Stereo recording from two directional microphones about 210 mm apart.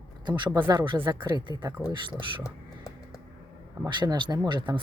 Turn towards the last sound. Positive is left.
turn(degrees=-20)  # may be behind; listen again after turning